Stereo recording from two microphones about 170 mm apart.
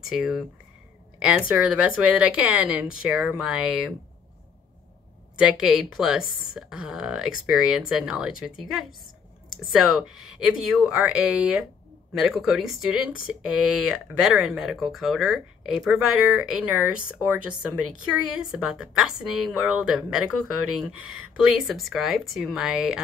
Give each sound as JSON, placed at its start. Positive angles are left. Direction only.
{"t": 0.1, "sound": "speech", "side_deg": -5}
{"t": 1.5, "sound": "speech", "side_deg": -5}
{"t": 5.4, "sound": "speech", "side_deg": -5}